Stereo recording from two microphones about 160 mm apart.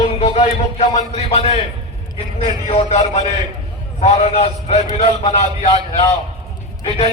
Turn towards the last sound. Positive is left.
turn(degrees=35)  # may be behind; listen again after turning